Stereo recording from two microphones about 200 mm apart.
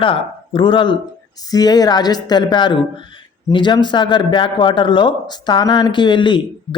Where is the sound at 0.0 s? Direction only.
25° left (ahead or behind).